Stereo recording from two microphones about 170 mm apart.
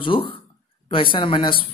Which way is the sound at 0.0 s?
30° left (ahead or behind).